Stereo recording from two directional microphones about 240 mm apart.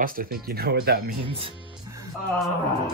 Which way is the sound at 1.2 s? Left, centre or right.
Right.